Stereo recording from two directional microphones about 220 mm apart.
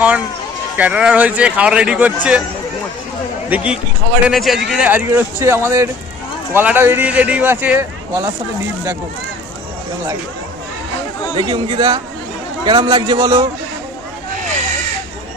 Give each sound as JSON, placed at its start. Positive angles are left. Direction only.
{"t": 0.8, "sound": "speech", "side_deg": -5}
{"t": 3.5, "sound": "speech", "side_deg": -5}
{"t": 11.3, "sound": "a man's voice", "side_deg": -20}